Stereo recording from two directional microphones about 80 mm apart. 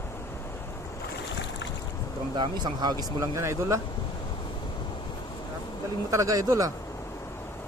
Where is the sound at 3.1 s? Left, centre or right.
Right.